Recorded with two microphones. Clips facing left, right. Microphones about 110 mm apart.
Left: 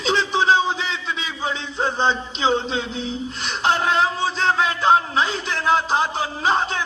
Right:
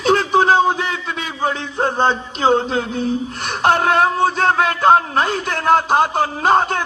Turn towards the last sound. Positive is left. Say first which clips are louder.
# right 6 dB
turn(degrees=-50)  # may be behind; listen again after turning